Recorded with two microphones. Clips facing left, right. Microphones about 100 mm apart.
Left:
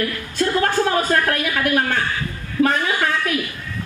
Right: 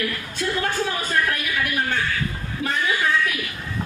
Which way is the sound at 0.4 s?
50° left (ahead or behind).